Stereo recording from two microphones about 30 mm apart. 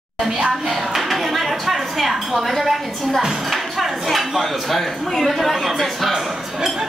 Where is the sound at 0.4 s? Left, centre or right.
Centre.